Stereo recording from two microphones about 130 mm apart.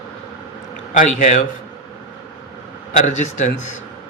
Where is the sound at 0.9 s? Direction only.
75° left (ahead or behind).